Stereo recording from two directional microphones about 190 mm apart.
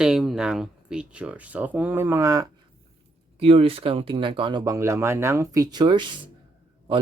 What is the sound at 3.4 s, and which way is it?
Speech, 30° right (ahead or behind).